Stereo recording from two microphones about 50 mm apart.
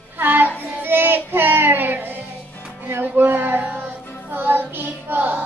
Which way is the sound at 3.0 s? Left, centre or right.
Right.